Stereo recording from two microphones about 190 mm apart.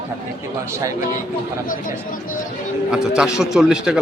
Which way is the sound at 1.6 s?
45° left (ahead or behind).